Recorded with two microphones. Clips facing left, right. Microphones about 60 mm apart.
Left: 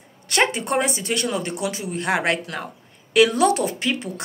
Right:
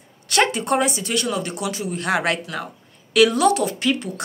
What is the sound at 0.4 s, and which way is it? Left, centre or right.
A woman's voice, left.